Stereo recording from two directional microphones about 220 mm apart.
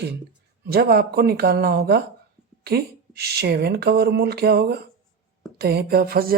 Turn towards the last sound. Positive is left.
turn(degrees=-40)  # may be behind; listen again after turning